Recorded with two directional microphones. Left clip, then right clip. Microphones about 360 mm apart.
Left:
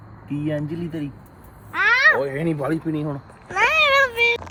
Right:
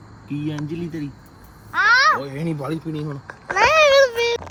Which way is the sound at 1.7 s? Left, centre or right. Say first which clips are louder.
Right 1 dB; centre.